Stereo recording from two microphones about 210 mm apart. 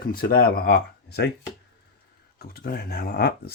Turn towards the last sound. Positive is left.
turn(degrees=50)  # may be behind; listen again after turning